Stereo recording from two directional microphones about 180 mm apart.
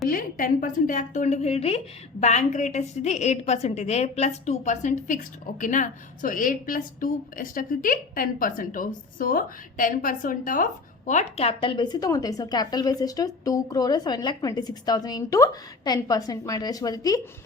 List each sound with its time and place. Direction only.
0.1 s a woman's voice: 50° left (ahead or behind); by 17.2 s 20° left (ahead or behind)